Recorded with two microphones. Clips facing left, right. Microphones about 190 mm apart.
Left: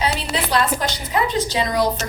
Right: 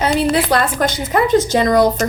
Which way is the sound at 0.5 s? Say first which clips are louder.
Right 4 dB; 50° right (ahead or behind).